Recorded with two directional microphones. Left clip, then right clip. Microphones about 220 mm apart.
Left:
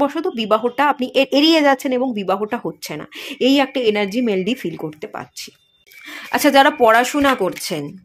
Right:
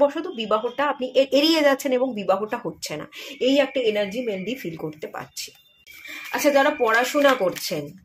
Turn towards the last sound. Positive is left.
turn(degrees=35)  # may be behind; listen again after turning